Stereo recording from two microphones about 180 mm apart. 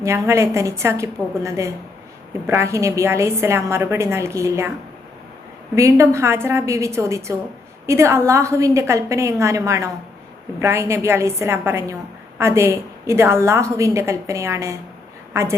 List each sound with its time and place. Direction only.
0.0 s a woman's voice: 15° right (ahead or behind)
5.7 s a woman's voice: 15° right (ahead or behind)